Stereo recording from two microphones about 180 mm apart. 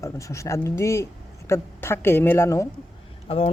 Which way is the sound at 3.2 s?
30° left (ahead or behind).